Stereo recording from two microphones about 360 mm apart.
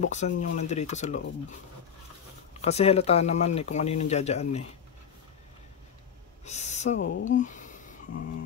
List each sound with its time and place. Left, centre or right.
0.0 s speech: centre
2.6 s speech: centre
6.4 s speech: centre
7.3 s a sound: left